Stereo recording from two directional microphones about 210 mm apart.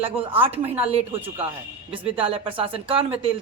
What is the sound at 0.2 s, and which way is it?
Speech, 25° right (ahead or behind).